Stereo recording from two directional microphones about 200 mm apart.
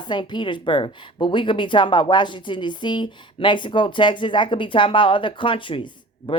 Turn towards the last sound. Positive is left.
turn(degrees=25)  # may be behind; listen again after turning